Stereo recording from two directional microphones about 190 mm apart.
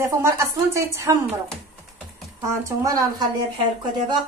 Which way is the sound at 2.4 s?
20° right (ahead or behind).